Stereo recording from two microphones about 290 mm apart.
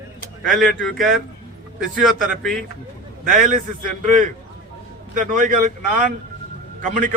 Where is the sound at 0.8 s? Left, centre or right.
Centre.